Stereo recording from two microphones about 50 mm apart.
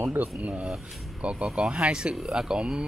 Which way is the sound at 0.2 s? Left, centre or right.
Right.